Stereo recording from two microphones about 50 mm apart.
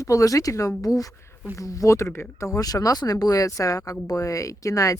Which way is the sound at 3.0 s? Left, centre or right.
Left.